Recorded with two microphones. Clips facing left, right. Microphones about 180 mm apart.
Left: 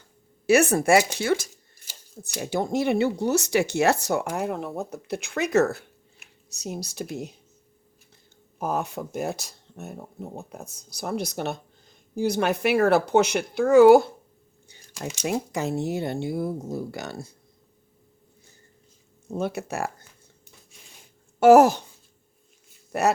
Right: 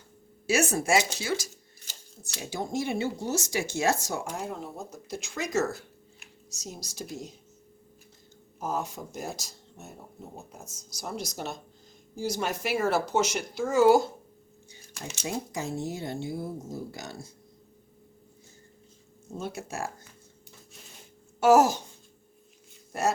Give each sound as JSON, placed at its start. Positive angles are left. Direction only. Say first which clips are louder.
{"t": 0.4, "sound": "speech", "louder": "left 7 dB", "side_deg": 60}
{"t": 8.5, "sound": "speech", "louder": "left 5 dB", "side_deg": 65}
{"t": 15.3, "sound": "speech", "louder": "left 6 dB", "side_deg": 65}
{"t": 19.3, "sound": "speech", "louder": "left 7 dB", "side_deg": 65}
{"t": 21.4, "sound": "speech", "louder": "left 6 dB", "side_deg": 60}
{"t": 22.9, "sound": "speech", "louder": "left 5 dB", "side_deg": 65}